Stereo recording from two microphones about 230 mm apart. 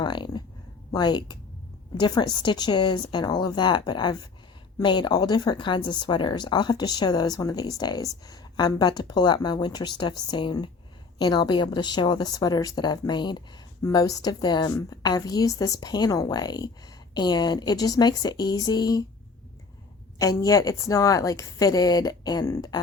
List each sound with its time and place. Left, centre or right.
0.0 s speech: centre
20.1 s speech: centre